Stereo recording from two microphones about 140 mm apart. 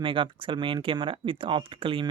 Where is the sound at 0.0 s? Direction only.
40° right (ahead or behind).